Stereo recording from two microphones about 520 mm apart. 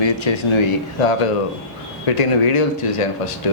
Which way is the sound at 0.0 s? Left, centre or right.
Left.